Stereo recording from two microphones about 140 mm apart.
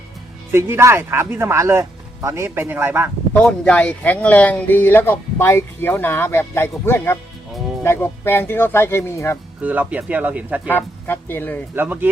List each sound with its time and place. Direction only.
0.5 s speech: 20° right (ahead or behind)
3.3 s speech: 10° left (ahead or behind)
9.6 s speech: 10° right (ahead or behind)
10.7 s speech: 15° left (ahead or behind)
11.7 s speech: 15° right (ahead or behind)